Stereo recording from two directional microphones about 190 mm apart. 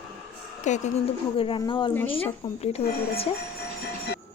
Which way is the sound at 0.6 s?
40° left (ahead or behind).